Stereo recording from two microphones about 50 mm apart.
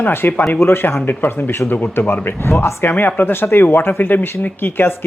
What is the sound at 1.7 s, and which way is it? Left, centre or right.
Speech, left.